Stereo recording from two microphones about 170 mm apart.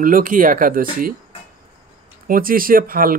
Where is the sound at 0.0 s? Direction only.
55° right (ahead or behind).